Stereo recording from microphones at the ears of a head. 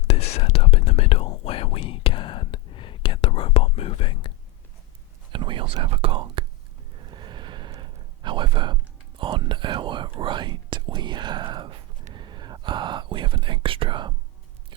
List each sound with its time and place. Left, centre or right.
0.0 s whispering: left
5.3 s speech: right
6.9 s a sound: right